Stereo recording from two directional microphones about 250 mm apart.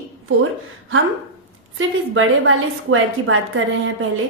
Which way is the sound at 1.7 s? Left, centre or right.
Right.